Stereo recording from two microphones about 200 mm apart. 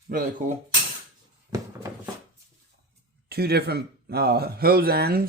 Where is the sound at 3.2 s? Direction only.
50° right (ahead or behind).